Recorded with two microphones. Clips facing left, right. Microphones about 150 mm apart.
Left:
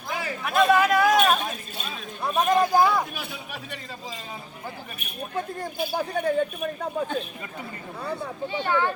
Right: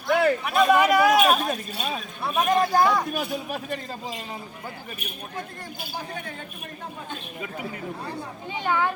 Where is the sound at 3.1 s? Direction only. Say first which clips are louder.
Right 8 dB; 45° right (ahead or behind).